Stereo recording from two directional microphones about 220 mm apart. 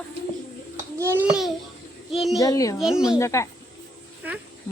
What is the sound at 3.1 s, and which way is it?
Speech, 15° left (ahead or behind).